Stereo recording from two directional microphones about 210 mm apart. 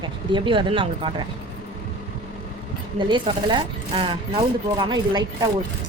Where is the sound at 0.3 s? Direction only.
25° right (ahead or behind).